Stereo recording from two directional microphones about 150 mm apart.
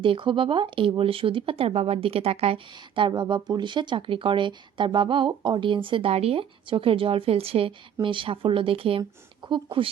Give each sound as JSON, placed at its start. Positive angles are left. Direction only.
{"t": 0.0, "sound": "speech", "side_deg": -35}